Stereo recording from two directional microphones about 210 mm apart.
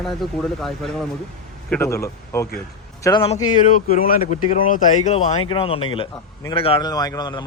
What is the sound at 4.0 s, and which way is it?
A man's voice, 40° left (ahead or behind).